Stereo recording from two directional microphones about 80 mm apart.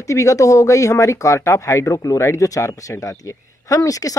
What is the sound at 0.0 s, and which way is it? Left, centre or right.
Speech, left.